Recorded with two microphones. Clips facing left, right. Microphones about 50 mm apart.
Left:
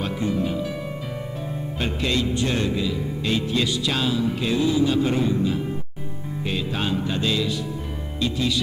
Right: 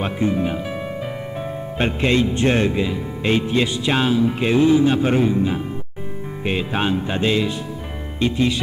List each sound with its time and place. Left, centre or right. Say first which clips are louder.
0.0 s speech: right 4 dB; right
1.8 s speech: right 6 dB; right